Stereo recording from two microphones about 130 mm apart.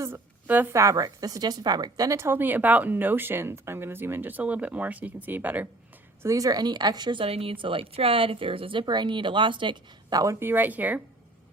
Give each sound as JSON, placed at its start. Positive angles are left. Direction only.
{"t": 0.0, "sound": "a woman's voice", "side_deg": -15}
{"t": 6.2, "sound": "a woman's voice", "side_deg": -25}